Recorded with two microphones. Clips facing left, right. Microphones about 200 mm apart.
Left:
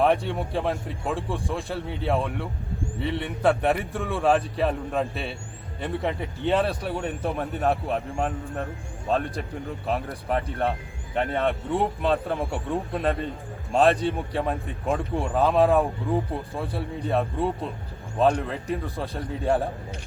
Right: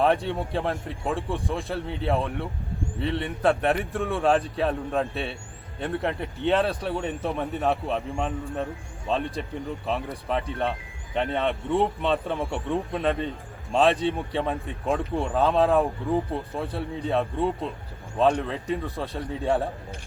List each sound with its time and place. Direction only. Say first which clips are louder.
0.0 s speech: left 1 dB; centre (ahead or behind)